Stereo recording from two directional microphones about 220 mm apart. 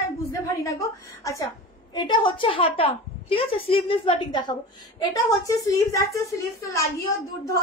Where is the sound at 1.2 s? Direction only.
15° left (ahead or behind).